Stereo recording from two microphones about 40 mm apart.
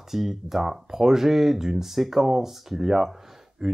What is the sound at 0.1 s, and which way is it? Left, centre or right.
Speech, centre.